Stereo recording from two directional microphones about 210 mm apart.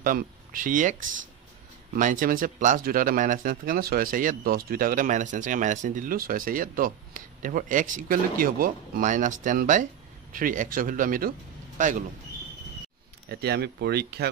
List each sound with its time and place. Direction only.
0.0 s speech: 40° right (ahead or behind)
2.0 s speech: 40° right (ahead or behind)
13.3 s speech: 50° right (ahead or behind)